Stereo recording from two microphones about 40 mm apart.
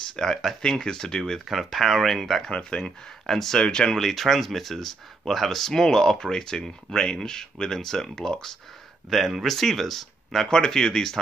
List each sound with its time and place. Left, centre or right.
0.1 s speech: centre
1.4 s speech: centre
2.5 s speech: centre
3.3 s speech: centre
3.5 s speech: centre
4.0 s speech: centre
9.1 s speech: centre
10.4 s speech: centre